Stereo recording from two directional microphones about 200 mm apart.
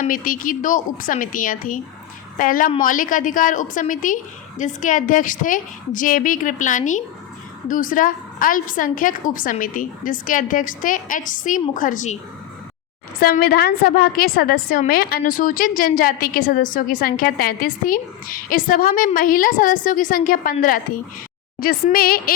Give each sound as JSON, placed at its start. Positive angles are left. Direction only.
{"t": 0.0, "sound": "a woman's voice", "side_deg": 45}
{"t": 13.1, "sound": "a woman's voice", "side_deg": 50}